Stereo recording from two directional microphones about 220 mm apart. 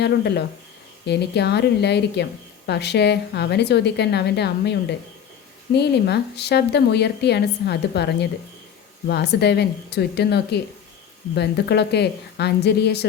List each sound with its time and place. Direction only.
0.0 s speech: 50° left (ahead or behind)